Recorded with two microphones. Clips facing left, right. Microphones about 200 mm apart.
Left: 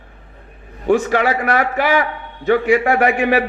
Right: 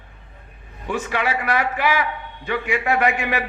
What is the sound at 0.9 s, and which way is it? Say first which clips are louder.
A man's voice: left 9 dB; 45° left (ahead or behind).